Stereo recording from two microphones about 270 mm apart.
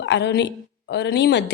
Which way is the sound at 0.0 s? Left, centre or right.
Left.